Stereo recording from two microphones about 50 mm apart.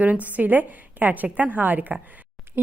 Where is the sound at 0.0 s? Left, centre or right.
Right.